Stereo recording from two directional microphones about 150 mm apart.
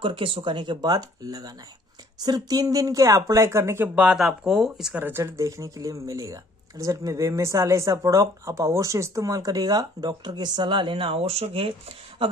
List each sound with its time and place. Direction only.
0.0 s speech: 35° right (ahead or behind); by 5.0 s 5° right (ahead or behind)
5.0 s speech: 20° right (ahead or behind); by 11.7 s 40° right (ahead or behind)